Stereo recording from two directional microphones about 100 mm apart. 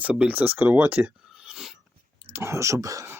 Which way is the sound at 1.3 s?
5° right (ahead or behind).